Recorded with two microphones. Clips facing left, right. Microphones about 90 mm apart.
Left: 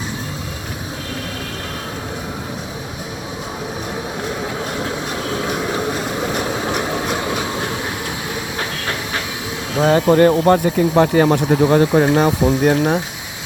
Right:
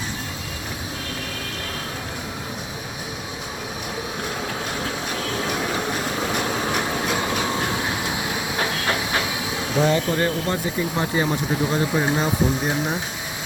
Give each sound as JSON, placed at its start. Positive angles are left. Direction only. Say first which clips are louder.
{"t": 9.7, "sound": "speech", "louder": "left 5 dB", "side_deg": 50}
{"t": 10.1, "sound": "speech", "louder": "left 11 dB", "side_deg": 65}